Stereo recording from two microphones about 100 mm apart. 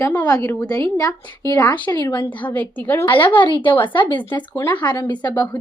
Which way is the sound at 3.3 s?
55° left (ahead or behind).